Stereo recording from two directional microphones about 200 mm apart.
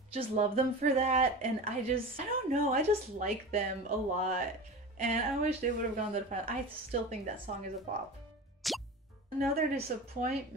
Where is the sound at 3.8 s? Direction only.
35° right (ahead or behind).